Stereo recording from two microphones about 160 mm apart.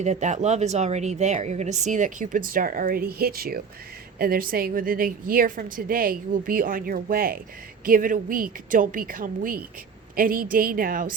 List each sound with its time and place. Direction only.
0.0 s a woman's voice: 45° right (ahead or behind); by 11.1 s 60° right (ahead or behind)